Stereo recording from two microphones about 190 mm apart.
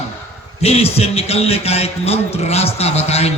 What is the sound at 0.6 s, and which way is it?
A man's voice, 30° left (ahead or behind).